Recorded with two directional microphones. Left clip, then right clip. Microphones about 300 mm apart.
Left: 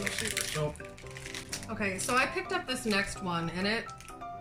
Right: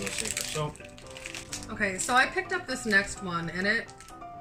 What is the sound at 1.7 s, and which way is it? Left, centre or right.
Speech, centre.